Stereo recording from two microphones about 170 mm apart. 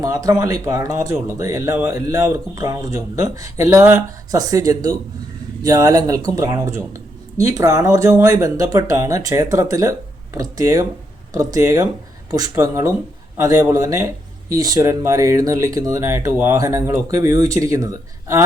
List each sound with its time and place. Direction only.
0.0 s speech: 20° right (ahead or behind)